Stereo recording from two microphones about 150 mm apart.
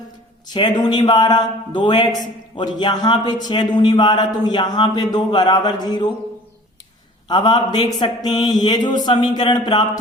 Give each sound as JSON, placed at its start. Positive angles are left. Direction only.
{"t": 0.5, "sound": "speech", "side_deg": 30}
{"t": 7.3, "sound": "speech", "side_deg": 30}